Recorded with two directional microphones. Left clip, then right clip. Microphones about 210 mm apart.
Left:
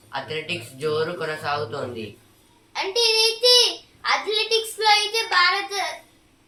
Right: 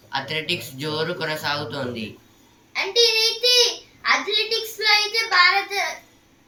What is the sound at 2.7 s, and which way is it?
A child's voice, 20° left (ahead or behind).